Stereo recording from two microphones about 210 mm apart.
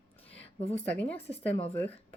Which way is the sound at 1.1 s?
30° left (ahead or behind).